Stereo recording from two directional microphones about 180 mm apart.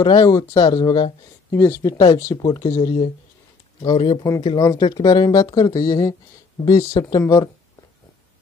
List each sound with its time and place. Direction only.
0.0 s speech: 20° left (ahead or behind)
1.5 s speech: 15° left (ahead or behind)